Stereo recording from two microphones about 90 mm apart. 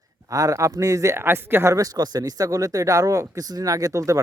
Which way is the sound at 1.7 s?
45° right (ahead or behind).